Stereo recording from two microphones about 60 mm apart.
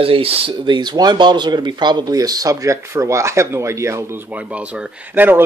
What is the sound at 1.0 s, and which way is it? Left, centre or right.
Speech, right.